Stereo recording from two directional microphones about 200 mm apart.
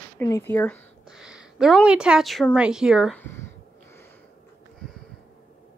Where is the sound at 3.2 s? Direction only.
15° left (ahead or behind).